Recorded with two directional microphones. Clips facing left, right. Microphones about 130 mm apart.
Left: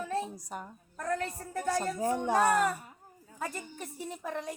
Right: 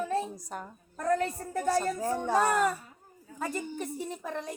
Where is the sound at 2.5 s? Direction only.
5° left (ahead or behind).